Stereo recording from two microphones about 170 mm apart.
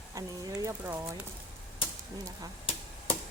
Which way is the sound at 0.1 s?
20° right (ahead or behind).